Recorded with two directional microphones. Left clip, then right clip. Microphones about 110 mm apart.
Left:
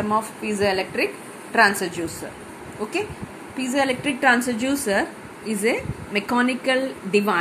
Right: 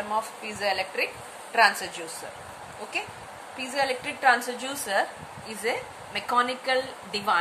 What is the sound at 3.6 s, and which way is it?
A woman's voice, 20° left (ahead or behind).